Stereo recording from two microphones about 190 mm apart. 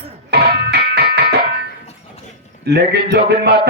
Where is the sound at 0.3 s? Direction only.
60° right (ahead or behind).